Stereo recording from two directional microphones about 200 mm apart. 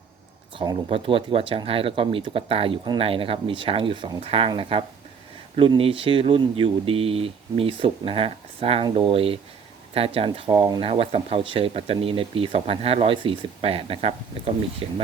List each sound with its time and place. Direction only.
0.5 s speech: 25° right (ahead or behind)